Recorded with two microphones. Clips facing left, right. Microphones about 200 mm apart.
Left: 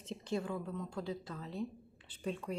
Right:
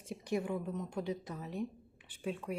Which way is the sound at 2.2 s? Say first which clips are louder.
Right 1 dB; 5° right (ahead or behind).